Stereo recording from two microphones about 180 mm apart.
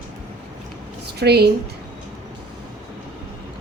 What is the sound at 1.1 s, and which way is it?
Speech, 65° right (ahead or behind).